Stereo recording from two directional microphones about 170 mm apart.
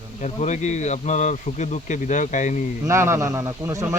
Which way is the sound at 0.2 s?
40° left (ahead or behind).